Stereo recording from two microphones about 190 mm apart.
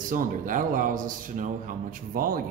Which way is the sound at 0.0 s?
45° right (ahead or behind).